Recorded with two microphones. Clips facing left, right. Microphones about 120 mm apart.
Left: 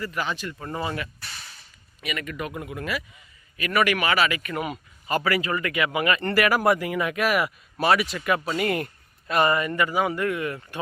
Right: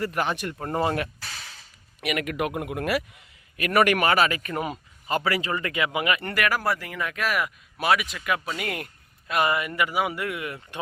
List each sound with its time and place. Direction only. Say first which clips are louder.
0.0 s speech: right 3 dB; 55° right (ahead or behind)
1.2 s a sound: right 2 dB; 90° right
2.0 s a man's voice: right 5 dB; 65° right (ahead or behind); by 6.2 s 15° right (ahead or behind)
6.2 s speech: left 5 dB; 5° left (ahead or behind); by 10.8 s 15° right (ahead or behind)